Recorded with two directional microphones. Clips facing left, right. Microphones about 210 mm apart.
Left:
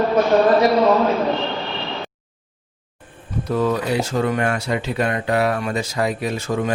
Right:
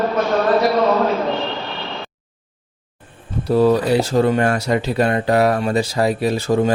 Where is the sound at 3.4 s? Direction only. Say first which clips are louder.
Right 6 dB; 30° right (ahead or behind).